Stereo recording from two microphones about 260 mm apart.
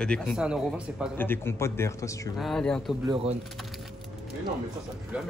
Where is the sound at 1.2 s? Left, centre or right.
Centre.